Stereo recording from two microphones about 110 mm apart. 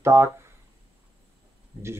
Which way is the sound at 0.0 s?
25° right (ahead or behind).